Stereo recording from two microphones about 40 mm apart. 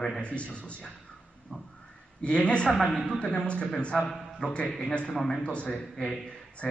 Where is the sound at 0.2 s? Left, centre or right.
Left.